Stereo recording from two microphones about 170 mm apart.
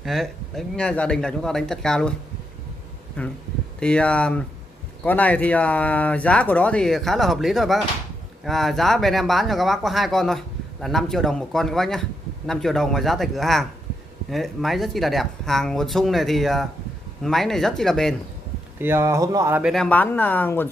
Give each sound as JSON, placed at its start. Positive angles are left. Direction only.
{"t": 0.0, "sound": "speech", "side_deg": 0}
{"t": 3.2, "sound": "speech", "side_deg": 10}
{"t": 18.8, "sound": "speech", "side_deg": -15}
{"t": 19.6, "sound": "speech", "side_deg": 0}